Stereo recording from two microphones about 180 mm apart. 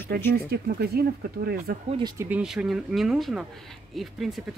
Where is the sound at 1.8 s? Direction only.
30° right (ahead or behind).